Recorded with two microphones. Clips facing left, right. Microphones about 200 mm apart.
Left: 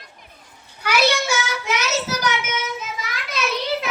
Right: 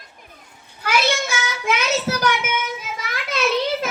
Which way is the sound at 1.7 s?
55° right (ahead or behind).